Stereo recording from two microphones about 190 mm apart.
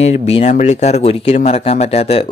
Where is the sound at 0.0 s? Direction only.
35° left (ahead or behind).